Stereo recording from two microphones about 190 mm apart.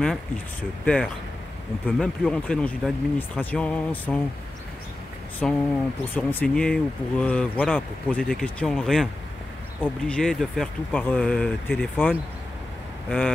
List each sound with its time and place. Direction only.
0.0 s speech: 5° left (ahead or behind)
5.4 s speech: centre (ahead or behind)